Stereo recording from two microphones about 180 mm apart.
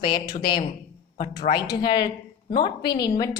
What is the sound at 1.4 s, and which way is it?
A woman's voice, 25° left (ahead or behind).